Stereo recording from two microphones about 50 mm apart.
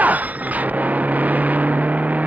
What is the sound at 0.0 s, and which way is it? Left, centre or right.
Vehicle, right.